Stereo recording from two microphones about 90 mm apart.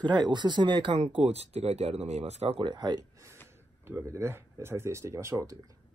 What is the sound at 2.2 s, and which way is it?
Speech, 80° right.